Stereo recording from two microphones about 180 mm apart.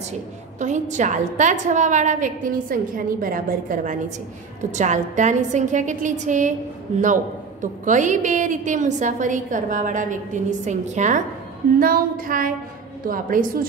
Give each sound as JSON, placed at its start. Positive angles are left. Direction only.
{"t": 0.6, "sound": "a woman's voice", "side_deg": -40}
{"t": 7.6, "sound": "a woman's voice", "side_deg": -45}